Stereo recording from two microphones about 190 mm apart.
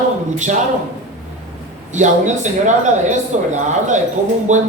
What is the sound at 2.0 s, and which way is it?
Speech, 40° right (ahead or behind).